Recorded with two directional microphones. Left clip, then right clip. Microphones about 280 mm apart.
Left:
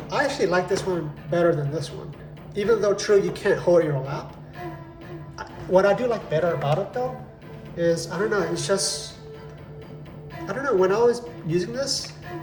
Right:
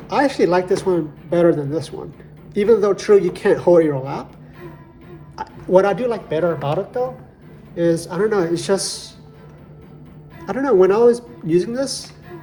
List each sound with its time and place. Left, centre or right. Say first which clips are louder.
0.1 s speech: right 6 dB; centre
5.4 s speech: right 4 dB; centre
7.8 s speech: right 5 dB; right
10.4 s speech: right 7 dB; centre